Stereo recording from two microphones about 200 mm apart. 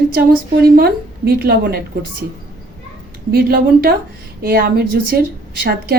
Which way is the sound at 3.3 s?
50° right (ahead or behind).